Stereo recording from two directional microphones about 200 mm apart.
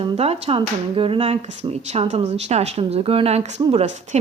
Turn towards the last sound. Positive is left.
turn(degrees=-35)  # may be behind; listen again after turning